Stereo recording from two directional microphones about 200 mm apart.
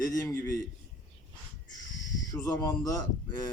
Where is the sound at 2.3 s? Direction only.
15° left (ahead or behind).